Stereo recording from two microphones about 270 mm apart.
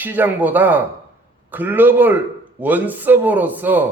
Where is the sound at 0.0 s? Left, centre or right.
Centre.